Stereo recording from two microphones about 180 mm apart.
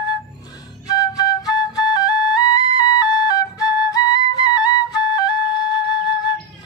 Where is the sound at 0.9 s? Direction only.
20° left (ahead or behind).